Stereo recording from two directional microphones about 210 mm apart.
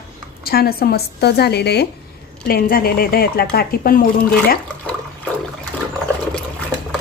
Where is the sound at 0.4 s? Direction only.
45° left (ahead or behind).